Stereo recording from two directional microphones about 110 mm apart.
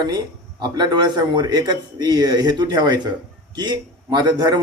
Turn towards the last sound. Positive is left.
turn(degrees=-40)  # may be behind; listen again after turning